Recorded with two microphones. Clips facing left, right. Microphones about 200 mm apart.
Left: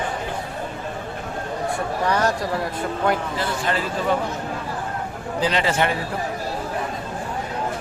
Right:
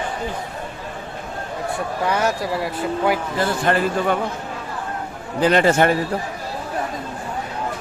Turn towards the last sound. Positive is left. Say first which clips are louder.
# right 6 dB
turn(degrees=-45)  # may be behind; listen again after turning